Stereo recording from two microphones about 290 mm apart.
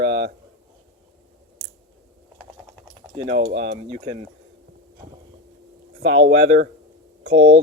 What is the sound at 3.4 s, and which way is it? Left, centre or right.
Speech, right.